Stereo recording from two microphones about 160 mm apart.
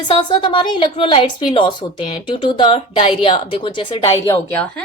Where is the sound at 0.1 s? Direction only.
30° left (ahead or behind).